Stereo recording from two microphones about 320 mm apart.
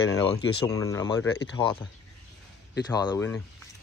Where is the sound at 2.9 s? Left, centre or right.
Centre.